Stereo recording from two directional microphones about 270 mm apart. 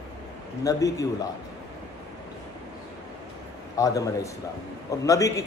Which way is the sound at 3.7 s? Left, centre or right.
Centre.